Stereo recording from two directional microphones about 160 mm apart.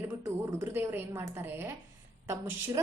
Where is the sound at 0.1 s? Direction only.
15° right (ahead or behind).